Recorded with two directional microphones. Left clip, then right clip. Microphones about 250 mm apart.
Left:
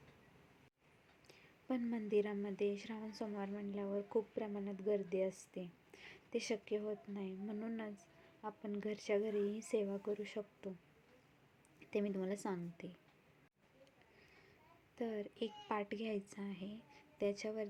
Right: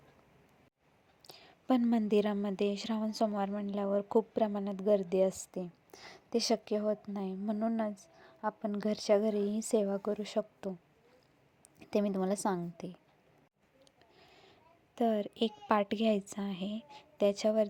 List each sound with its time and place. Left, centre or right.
1.3 s a woman's voice: right
11.8 s a woman's voice: right
14.9 s a woman's voice: right